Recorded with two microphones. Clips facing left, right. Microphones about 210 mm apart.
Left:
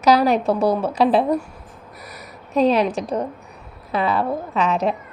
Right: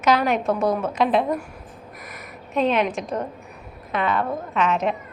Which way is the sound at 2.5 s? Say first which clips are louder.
Left 4 dB; 35° left (ahead or behind).